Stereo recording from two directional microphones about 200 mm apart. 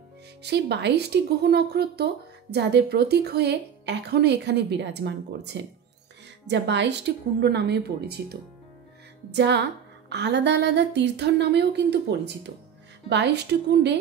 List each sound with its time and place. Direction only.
0.4 s speech: 55° right (ahead or behind)